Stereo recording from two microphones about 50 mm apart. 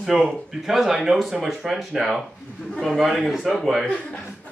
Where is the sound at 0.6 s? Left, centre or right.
Centre.